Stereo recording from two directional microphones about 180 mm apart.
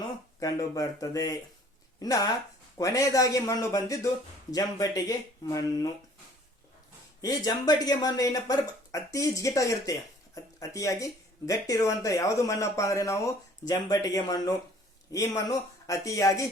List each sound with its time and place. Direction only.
0.0 s speech: 20° left (ahead or behind)
7.2 s speech: 20° left (ahead or behind)